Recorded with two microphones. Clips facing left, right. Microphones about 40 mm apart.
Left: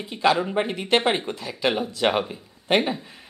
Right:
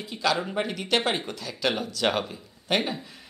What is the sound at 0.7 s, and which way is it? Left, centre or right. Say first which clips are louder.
A man's voice: left 4 dB; left.